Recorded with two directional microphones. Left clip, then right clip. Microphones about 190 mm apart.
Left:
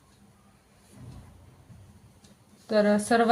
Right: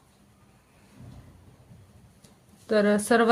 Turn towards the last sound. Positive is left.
turn(degrees=-40)  # may be behind; listen again after turning